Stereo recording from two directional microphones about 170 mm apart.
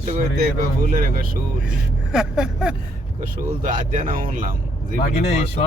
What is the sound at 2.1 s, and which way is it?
Vehicle, 5° right (ahead or behind).